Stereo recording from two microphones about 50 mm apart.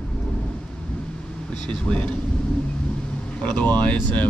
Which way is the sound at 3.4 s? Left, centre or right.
Left.